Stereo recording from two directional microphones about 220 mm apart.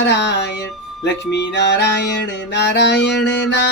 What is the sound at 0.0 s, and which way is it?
Music, 50° left (ahead or behind).